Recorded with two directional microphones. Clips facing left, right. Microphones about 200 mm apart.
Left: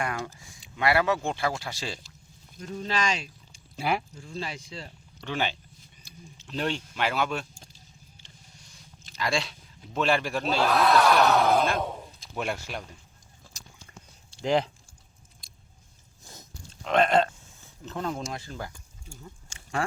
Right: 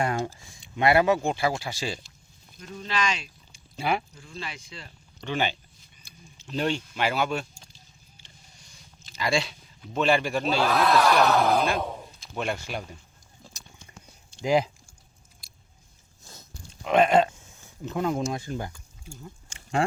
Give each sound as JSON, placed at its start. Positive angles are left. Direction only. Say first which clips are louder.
{"t": 0.0, "sound": "speech", "louder": "right 5 dB", "side_deg": -30}
{"t": 2.6, "sound": "speech", "louder": "even", "side_deg": 40}
{"t": 3.8, "sound": "speech", "louder": "right 1 dB", "side_deg": 5}
{"t": 4.2, "sound": "speech", "louder": "left 3 dB", "side_deg": 35}
{"t": 5.2, "sound": "speech", "louder": "right 2 dB", "side_deg": 0}
{"t": 13.5, "sound": "a sound", "louder": "left 4 dB", "side_deg": -20}
{"t": 14.4, "sound": "speech", "louder": "right 2 dB", "side_deg": -10}
{"t": 15.4, "sound": "biting", "louder": "left 1 dB", "side_deg": -5}
{"t": 16.2, "sound": "a sound", "louder": "left 1 dB", "side_deg": 15}
{"t": 16.8, "sound": "speech", "louder": "right 2 dB", "side_deg": -10}